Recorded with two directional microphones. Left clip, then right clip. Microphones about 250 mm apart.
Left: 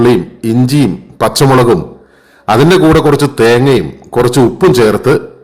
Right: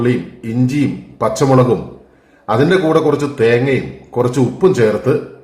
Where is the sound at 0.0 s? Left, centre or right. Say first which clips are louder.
Left 8 dB; left.